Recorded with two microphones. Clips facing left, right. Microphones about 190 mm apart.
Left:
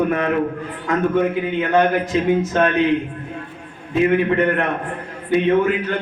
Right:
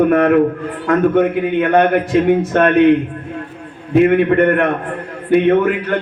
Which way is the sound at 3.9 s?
60° right (ahead or behind).